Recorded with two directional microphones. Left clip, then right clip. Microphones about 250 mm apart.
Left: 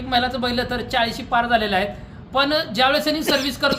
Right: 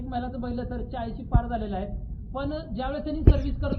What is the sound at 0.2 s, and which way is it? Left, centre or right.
Speech, left.